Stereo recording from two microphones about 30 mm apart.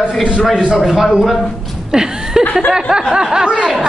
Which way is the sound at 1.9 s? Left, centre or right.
Right.